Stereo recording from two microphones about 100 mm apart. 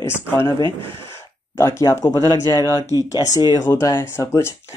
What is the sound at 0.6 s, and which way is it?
Speech, 55° right (ahead or behind).